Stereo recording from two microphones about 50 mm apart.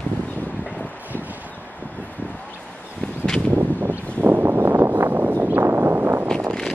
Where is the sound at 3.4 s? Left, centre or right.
Right.